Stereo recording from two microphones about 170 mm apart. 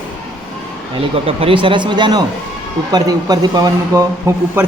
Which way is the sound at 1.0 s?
35° right (ahead or behind).